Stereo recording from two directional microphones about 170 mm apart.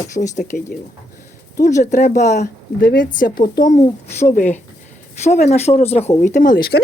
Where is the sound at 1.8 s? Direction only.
50° left (ahead or behind).